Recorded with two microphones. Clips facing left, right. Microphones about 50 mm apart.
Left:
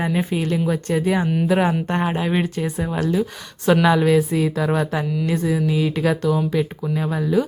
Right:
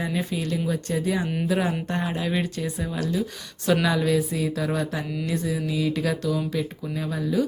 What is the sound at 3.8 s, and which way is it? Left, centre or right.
Speech, left.